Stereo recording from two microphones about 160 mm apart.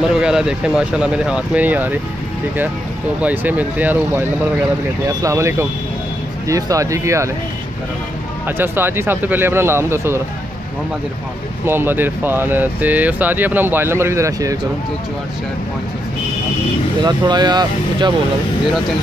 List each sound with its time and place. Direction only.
0.1 s speech: 5° right (ahead or behind)
3.2 s speech: 10° right (ahead or behind)
8.5 s speech: 15° right (ahead or behind)
11.6 s speech: 15° right (ahead or behind)
17.0 s speech: 25° right (ahead or behind)